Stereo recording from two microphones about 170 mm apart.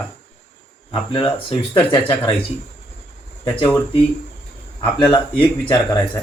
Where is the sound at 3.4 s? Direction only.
10° left (ahead or behind).